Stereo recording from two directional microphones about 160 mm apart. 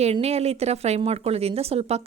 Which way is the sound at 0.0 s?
40° right (ahead or behind).